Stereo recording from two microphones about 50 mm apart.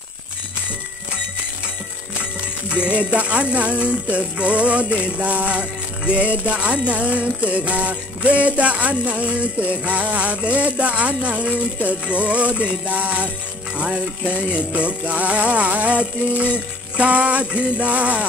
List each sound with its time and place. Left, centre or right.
2.7 s music: right